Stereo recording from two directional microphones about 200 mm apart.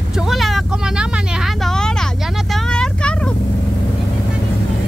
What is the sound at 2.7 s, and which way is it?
Vehicle, 5° left (ahead or behind).